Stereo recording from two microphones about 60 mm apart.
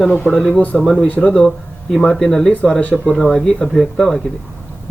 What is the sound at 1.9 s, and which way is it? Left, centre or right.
Speech, centre.